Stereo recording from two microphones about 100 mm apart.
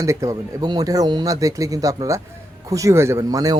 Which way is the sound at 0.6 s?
40° right (ahead or behind).